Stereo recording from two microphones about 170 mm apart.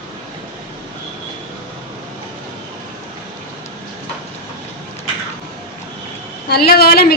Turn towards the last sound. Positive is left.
turn(degrees=65)  # may be behind; listen again after turning